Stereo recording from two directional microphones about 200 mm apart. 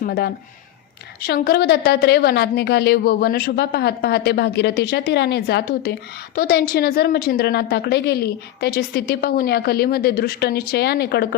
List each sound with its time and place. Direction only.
0.0 s a woman's voice: 55° left (ahead or behind)